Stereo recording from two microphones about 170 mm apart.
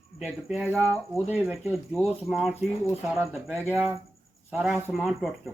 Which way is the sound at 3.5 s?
10° right (ahead or behind).